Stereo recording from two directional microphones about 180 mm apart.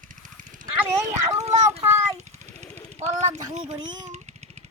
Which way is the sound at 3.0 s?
40° right (ahead or behind).